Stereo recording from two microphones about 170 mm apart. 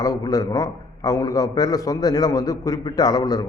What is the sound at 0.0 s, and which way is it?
A man's voice, 20° left (ahead or behind).